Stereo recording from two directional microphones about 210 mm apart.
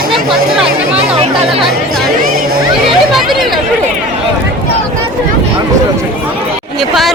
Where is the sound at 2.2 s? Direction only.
40° right (ahead or behind).